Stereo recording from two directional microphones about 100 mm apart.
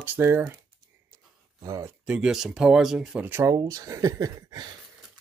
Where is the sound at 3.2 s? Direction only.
25° right (ahead or behind).